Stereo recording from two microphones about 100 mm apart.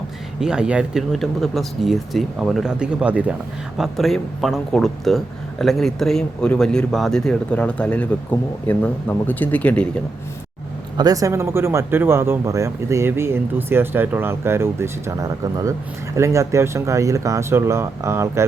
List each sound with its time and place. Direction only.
0.3 s speech: 5° right (ahead or behind)
3.8 s speech: centre (ahead or behind)
10.9 s speech: 40° right (ahead or behind)